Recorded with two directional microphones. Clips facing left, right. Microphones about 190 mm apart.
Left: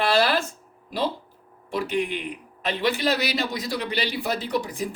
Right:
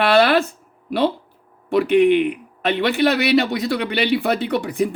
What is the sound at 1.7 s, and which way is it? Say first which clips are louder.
Speech: right 12 dB; 65° right (ahead or behind).